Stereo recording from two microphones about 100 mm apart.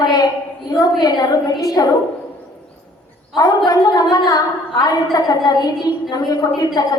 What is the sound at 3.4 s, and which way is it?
A woman's voice, 40° left (ahead or behind).